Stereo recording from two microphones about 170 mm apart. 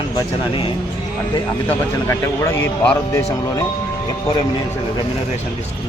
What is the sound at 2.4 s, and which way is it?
Speech, 15° left (ahead or behind).